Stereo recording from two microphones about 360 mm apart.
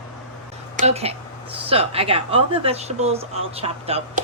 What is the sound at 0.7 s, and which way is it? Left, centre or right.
Speech, centre.